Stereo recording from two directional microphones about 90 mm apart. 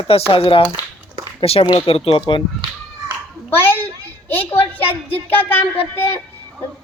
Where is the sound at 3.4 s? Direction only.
25° left (ahead or behind).